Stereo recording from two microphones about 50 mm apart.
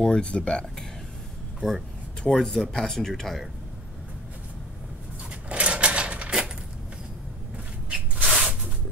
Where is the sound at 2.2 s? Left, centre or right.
Centre.